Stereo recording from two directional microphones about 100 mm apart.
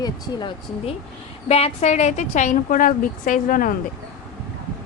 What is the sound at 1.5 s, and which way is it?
Speech, 90° left.